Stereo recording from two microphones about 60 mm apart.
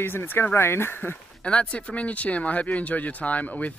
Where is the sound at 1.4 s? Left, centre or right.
Centre.